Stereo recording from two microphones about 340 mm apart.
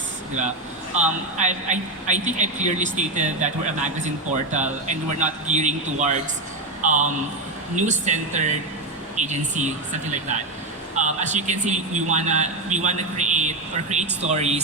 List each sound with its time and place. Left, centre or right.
0.9 s a man's voice: right